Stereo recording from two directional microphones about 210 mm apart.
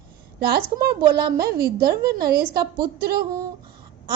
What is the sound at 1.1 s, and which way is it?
A woman's voice, 45° right (ahead or behind).